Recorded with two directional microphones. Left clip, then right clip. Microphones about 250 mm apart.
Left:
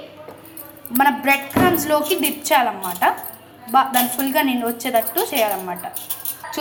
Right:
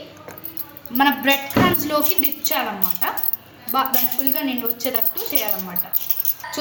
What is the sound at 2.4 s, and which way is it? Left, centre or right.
Speech, centre.